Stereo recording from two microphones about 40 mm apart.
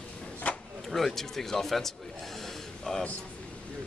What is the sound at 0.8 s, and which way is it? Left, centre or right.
A man's voice, centre.